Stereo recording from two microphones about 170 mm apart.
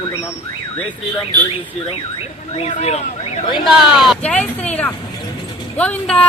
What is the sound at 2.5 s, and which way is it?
Speech, 40° left (ahead or behind).